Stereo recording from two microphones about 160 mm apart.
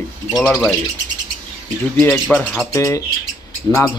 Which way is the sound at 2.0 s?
5° left (ahead or behind).